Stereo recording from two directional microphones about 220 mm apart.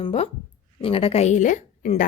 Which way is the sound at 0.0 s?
25° left (ahead or behind).